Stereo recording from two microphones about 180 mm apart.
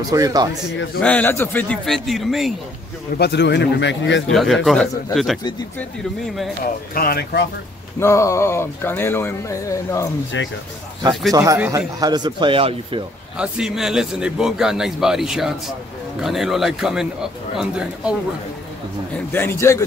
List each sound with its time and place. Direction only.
0.1 s speech: 20° right (ahead or behind)
1.0 s speech: 10° left (ahead or behind)
3.2 s speech: 70° left (ahead or behind); by 4.2 s 85° left
4.3 s a man's voice: centre (ahead or behind)
6.9 s speech: 55° left (ahead or behind)
8.0 s speech: 15° left (ahead or behind)
10.3 s speech: 90° left
11.3 s speech: 15° right (ahead or behind)
12.0 s speech: 25° right (ahead or behind)
13.4 s a man's voice: 5° right (ahead or behind)
19.1 s speech: 10° left (ahead or behind)